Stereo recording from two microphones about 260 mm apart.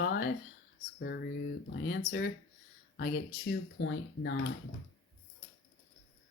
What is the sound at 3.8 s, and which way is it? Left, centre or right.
Speech, left.